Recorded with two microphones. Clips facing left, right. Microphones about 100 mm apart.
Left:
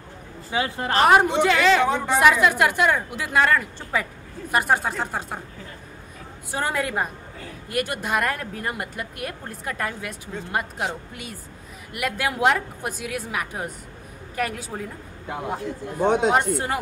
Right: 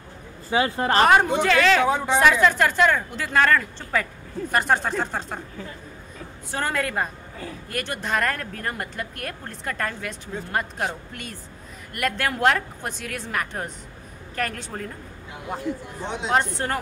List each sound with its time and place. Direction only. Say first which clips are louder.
0.5 s speech: right 3 dB; 40° right (ahead or behind)
1.0 s a woman's voice: left 3 dB; 5° left (ahead or behind)
1.8 s a woman's voice: even; 10° right (ahead or behind)
2.1 s a woman's voice: left 1 dB; 10° left (ahead or behind)
6.5 s a woman's voice: left 1 dB; 10° left (ahead or behind)
11.9 s a woman's voice: even; 5° left (ahead or behind)
16.0 s speech: left 11 dB; 50° left (ahead or behind)
16.3 s a woman's voice: left 2 dB; 10° left (ahead or behind)